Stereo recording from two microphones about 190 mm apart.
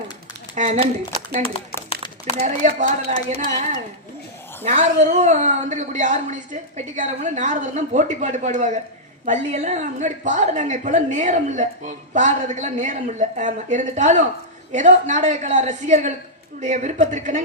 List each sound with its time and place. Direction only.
0.5 s a woman's voice: 35° right (ahead or behind)
1.9 s a sound: 30° left (ahead or behind)
2.4 s a woman's voice: 40° right (ahead or behind)